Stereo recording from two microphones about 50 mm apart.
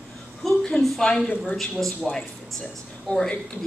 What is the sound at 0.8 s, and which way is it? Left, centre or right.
A woman's voice, centre.